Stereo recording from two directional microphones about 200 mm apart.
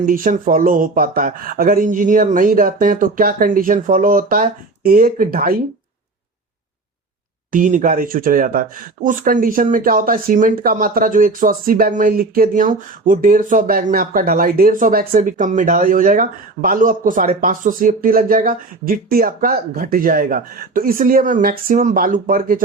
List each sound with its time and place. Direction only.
0.0 s speech: 45° right (ahead or behind)
7.5 s speech: 40° right (ahead or behind)